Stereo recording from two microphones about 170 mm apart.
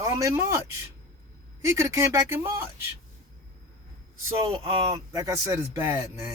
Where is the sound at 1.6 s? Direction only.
15° right (ahead or behind).